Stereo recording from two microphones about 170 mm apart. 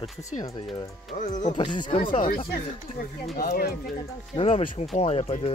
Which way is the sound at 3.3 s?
65° left (ahead or behind).